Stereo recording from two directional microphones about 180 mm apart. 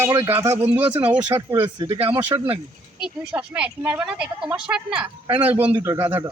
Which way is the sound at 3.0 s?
5° right (ahead or behind).